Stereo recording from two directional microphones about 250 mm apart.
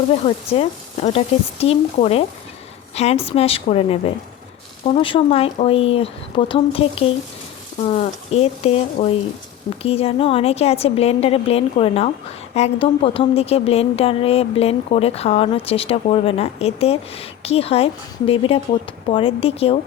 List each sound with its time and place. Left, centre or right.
0.1 s speech: left